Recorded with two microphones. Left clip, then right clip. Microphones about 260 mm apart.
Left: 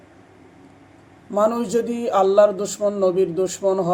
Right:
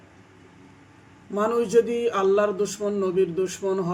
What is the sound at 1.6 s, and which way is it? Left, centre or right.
Music, left.